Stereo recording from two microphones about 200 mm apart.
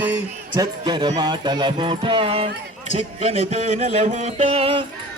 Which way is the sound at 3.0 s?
30° right (ahead or behind).